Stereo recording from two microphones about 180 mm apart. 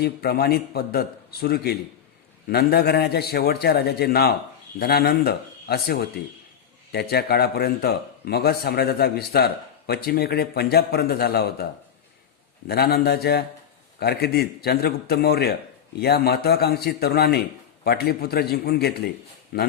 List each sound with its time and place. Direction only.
0.0 s a man's voice: 60° left (ahead or behind)
12.6 s a man's voice: 60° left (ahead or behind)